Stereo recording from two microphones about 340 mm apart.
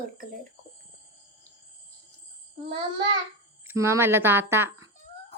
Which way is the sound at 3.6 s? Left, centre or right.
Centre.